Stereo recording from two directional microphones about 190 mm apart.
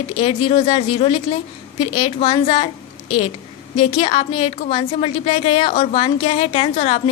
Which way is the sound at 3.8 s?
30° left (ahead or behind).